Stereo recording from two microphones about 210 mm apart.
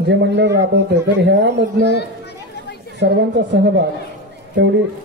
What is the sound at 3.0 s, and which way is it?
Speech, 55° right (ahead or behind).